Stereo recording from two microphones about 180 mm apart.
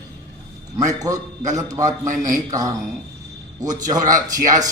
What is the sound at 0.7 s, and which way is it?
A man's voice, 20° right (ahead or behind).